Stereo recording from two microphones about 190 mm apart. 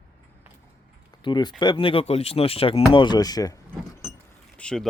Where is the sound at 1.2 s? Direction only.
25° left (ahead or behind).